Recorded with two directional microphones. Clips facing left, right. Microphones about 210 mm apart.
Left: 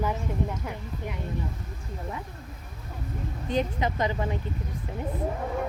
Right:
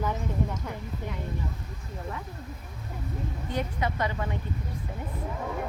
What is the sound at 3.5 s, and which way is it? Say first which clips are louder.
Speech: left 4 dB; 20° left (ahead or behind).